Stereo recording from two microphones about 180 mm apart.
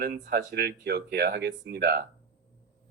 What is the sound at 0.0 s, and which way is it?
Speech, 60° right (ahead or behind).